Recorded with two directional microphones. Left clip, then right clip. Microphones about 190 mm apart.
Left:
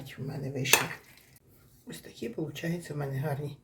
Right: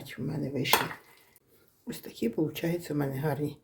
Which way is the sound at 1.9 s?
45° right (ahead or behind).